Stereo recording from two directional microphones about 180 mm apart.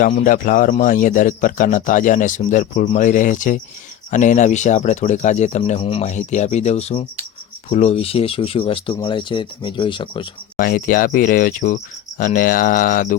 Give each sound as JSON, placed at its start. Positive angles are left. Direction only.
{"t": 0.1, "sound": "a man's voice", "side_deg": 45}
{"t": 10.6, "sound": "a man's voice", "side_deg": 50}